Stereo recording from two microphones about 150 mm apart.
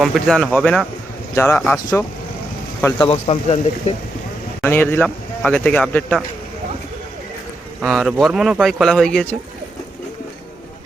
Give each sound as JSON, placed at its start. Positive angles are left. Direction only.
{"t": 0.0, "sound": "speech", "side_deg": 0}
{"t": 3.0, "sound": "a man's voice", "side_deg": 40}
{"t": 4.6, "sound": "speech", "side_deg": 15}
{"t": 7.8, "sound": "speech", "side_deg": 0}